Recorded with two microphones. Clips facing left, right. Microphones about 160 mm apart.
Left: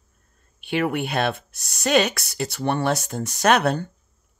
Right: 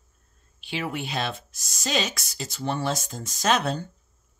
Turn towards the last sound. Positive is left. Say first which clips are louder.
# left 5 dB
turn(degrees=65)  # may be behind; listen again after turning